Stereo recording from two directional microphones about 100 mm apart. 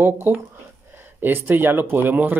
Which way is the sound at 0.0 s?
20° right (ahead or behind).